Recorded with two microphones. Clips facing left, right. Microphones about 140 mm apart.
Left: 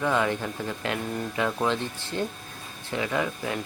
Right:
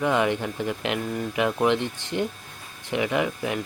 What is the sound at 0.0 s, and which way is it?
Speech, 20° right (ahead or behind).